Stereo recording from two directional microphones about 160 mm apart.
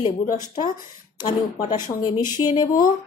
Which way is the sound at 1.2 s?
30° left (ahead or behind).